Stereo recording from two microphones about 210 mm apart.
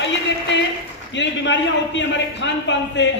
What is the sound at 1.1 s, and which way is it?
A man's voice, 60° left (ahead or behind).